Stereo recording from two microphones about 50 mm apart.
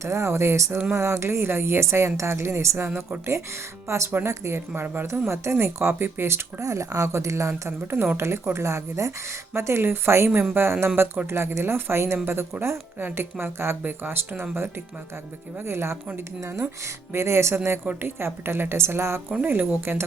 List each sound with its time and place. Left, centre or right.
0.0 s speech: right
2.7 s a woman's voice: right
3.8 s a woman's voice: right
5.3 s a woman's voice: right
6.6 s speech: right
8.1 s speech: right
8.5 s speech: right
9.5 s a woman's voice: right
15.6 s speech: right
16.4 s speech: right
17.5 s a woman's voice: right
19.5 s a woman's voice: right